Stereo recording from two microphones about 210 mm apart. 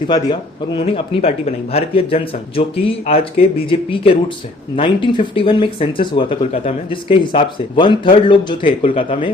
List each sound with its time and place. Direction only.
0.1 s speech: 20° left (ahead or behind)